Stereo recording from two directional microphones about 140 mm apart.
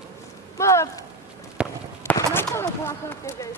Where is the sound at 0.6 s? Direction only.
20° left (ahead or behind).